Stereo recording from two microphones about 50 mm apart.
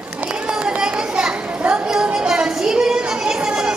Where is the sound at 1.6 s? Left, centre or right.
Right.